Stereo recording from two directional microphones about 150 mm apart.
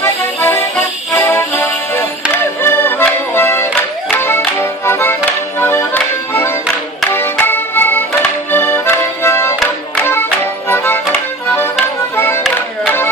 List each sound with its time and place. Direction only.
0.0 s music: 15° left (ahead or behind)
2.6 s accordion: 15° left (ahead or behind)
3.3 s music: 15° left (ahead or behind)
4.6 s accordion: 15° left (ahead or behind)
7.1 s music: 15° left (ahead or behind)
8.5 s accordion: 15° left (ahead or behind)
10.7 s accordion: 15° left (ahead or behind)
12.5 s music: 15° left (ahead or behind)